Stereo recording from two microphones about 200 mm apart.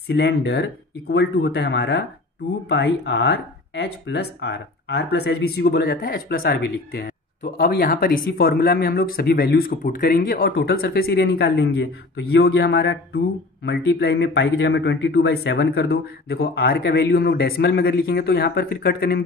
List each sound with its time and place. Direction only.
0.1 s speech: 55° left (ahead or behind)